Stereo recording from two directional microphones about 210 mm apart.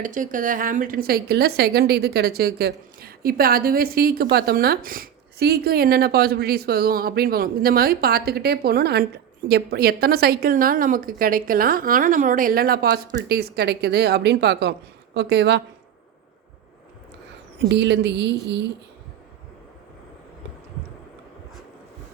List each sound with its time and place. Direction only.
0.0 s a woman's voice: 40° right (ahead or behind); by 15.6 s 55° right (ahead or behind)
17.6 s speech: 55° right (ahead or behind)